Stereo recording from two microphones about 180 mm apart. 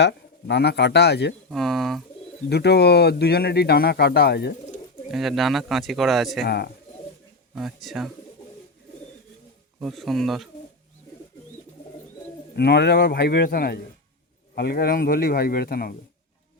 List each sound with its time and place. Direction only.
0.0 s speech: 70° left (ahead or behind)
1.5 s speech: centre (ahead or behind)
2.5 s speech: 65° left (ahead or behind)
5.1 s speech: centre (ahead or behind)
6.4 s speech: 65° left (ahead or behind)
7.5 s speech: centre (ahead or behind)
9.8 s speech: centre (ahead or behind)
12.5 s speech: 70° left (ahead or behind)